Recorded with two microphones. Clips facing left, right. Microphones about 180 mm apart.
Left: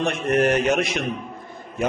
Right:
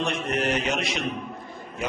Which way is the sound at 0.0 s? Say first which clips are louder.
Left 6 dB; 50° left (ahead or behind).